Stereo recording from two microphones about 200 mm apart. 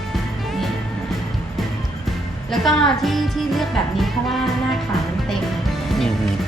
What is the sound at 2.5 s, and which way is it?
Music, centre (ahead or behind).